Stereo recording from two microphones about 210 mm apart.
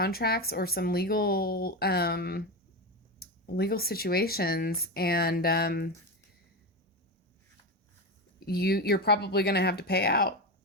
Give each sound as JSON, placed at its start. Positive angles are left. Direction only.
{"t": 0.0, "sound": "speech", "side_deg": 45}
{"t": 8.4, "sound": "speech", "side_deg": 50}